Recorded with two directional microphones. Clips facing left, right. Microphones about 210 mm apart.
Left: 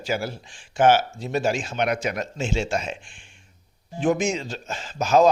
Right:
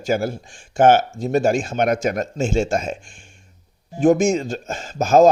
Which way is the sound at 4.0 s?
45° right (ahead or behind).